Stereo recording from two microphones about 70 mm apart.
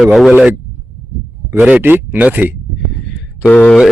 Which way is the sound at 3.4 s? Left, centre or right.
Left.